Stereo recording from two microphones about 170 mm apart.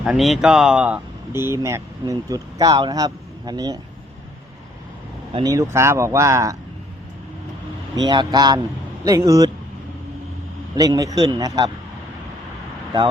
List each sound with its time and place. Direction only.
0.0 s speech: centre (ahead or behind); by 3.8 s 25° right (ahead or behind)
5.4 s speech: 20° right (ahead or behind)
7.9 s a man's voice: 25° right (ahead or behind)
10.8 s a man's voice: 20° right (ahead or behind)